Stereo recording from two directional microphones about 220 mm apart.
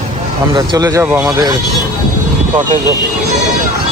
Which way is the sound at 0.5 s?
20° right (ahead or behind).